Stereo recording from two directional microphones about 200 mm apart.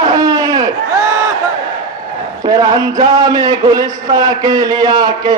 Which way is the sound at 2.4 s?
20° right (ahead or behind).